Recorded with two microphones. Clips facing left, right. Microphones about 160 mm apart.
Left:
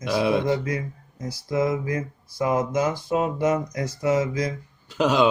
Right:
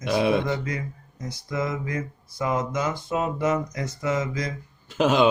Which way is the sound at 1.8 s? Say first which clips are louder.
Left 3 dB; 30° left (ahead or behind).